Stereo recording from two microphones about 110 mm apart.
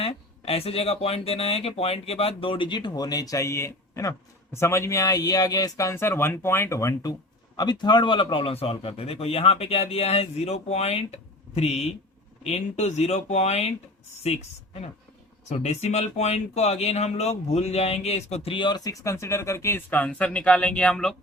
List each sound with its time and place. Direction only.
0.0 s speech: 65° left (ahead or behind); by 13.7 s 90° left
14.3 s speech: 70° left (ahead or behind)
15.4 s speech: 85° left
18.5 s speech: 45° left (ahead or behind); by 21.2 s 5° left (ahead or behind)